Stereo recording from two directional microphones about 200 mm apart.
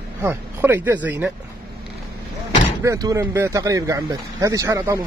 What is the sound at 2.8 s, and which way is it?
Speech, 15° right (ahead or behind).